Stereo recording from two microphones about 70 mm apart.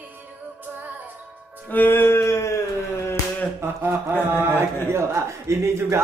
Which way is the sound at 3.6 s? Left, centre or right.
Right.